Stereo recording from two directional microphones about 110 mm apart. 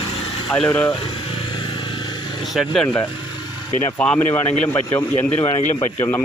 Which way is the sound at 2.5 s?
Centre (ahead or behind).